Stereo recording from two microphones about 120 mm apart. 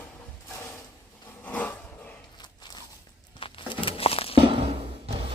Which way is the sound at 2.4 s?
35° left (ahead or behind).